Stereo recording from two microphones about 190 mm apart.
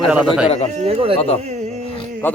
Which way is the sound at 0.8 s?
30° right (ahead or behind).